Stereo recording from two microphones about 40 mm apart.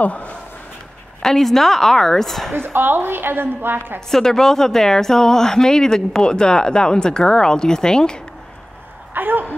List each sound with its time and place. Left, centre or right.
0.0 s speech: left
1.2 s speech: centre
2.5 s a woman's voice: right
4.1 s speech: centre
9.1 s speech: right